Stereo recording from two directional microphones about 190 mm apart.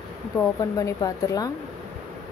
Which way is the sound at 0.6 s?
15° left (ahead or behind).